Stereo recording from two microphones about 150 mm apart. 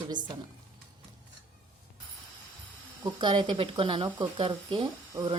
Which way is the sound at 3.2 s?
30° right (ahead or behind).